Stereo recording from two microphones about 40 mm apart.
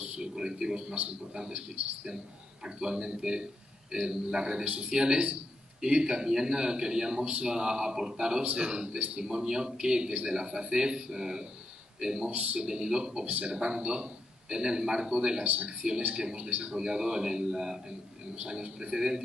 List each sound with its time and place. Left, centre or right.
0.0 s a sound: right
1.3 s a man's voice: centre
2.6 s a man's voice: centre
12.3 s a man's voice: right
12.6 s a man's voice: right
15.4 s a man's voice: right
16.2 s a man's voice: right
16.4 s a man's voice: right
16.8 s a man's voice: centre